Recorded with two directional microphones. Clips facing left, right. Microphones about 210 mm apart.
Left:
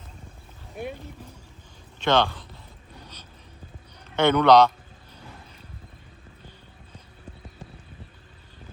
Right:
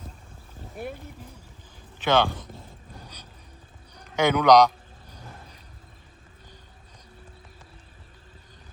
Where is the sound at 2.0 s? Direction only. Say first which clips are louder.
Even; 5° right (ahead or behind).